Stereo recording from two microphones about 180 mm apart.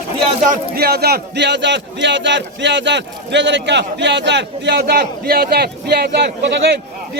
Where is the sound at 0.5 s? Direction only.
60° right (ahead or behind).